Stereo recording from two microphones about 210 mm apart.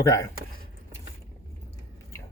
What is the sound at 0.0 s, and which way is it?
Speech, 15° left (ahead or behind).